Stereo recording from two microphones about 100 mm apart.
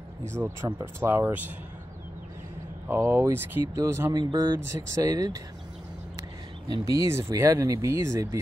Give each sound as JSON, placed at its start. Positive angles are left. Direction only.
{"t": 0.9, "sound": "speech", "side_deg": -25}
{"t": 2.9, "sound": "speech", "side_deg": -20}
{"t": 4.1, "sound": "speech", "side_deg": -45}
{"t": 4.6, "sound": "speech", "side_deg": -35}
{"t": 6.7, "sound": "speech", "side_deg": -35}